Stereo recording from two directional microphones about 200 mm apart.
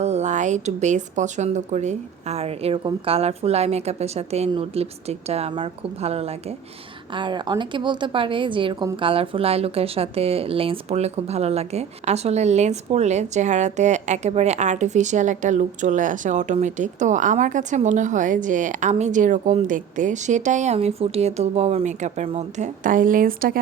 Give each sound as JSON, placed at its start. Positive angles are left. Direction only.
{"t": 0.0, "sound": "a woman's voice", "side_deg": -35}